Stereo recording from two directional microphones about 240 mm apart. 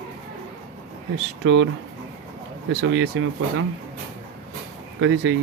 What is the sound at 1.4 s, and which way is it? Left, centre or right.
Speech, right.